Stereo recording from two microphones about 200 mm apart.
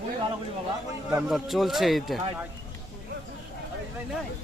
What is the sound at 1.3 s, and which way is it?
Speech, centre (ahead or behind).